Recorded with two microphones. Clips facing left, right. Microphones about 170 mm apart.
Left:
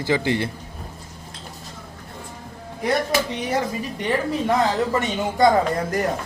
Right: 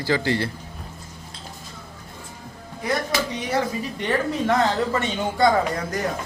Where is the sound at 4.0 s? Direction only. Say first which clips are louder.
Left 1 dB; 10° left (ahead or behind).